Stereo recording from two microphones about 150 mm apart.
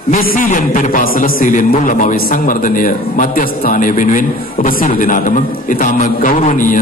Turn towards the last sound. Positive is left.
turn(degrees=65)  # may be behind; listen again after turning